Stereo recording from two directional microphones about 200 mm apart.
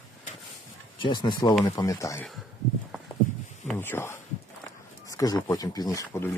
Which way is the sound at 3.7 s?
10° left (ahead or behind).